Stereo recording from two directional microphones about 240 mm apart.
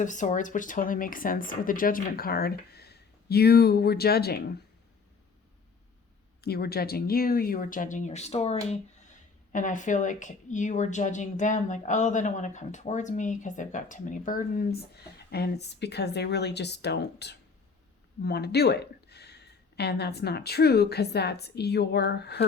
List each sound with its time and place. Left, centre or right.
0.0 s speech: left
6.4 s speech: left